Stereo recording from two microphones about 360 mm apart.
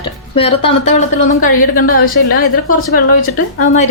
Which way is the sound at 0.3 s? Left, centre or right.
Centre.